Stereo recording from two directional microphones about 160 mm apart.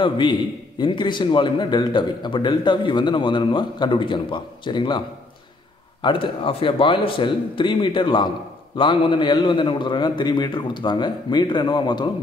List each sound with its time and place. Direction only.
0.0 s a man's voice: 30° left (ahead or behind)
6.0 s a man's voice: 35° left (ahead or behind)